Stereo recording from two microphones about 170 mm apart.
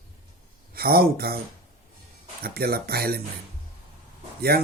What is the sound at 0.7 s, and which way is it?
Speech, 65° right (ahead or behind).